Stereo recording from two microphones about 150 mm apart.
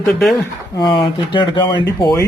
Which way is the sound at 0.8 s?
30° left (ahead or behind).